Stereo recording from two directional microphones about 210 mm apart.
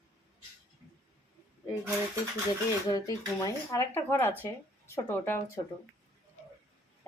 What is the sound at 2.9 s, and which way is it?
Speech, 15° left (ahead or behind).